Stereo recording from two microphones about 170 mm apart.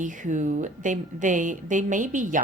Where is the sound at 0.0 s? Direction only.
45° right (ahead or behind).